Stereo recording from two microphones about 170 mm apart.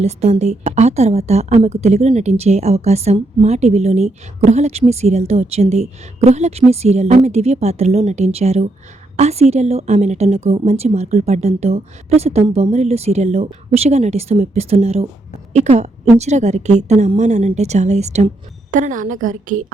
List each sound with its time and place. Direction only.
0.0 s a woman's voice: 40° right (ahead or behind)
18.7 s a woman's voice: 50° right (ahead or behind)